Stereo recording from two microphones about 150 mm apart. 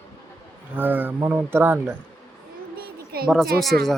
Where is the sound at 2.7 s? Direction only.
90° right.